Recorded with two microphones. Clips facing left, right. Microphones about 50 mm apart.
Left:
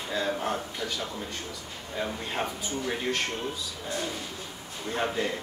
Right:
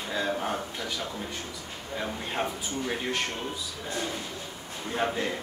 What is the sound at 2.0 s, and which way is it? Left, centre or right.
Speech, centre.